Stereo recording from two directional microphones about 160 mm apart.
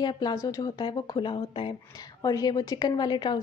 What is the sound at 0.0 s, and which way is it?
A woman's voice, 25° left (ahead or behind).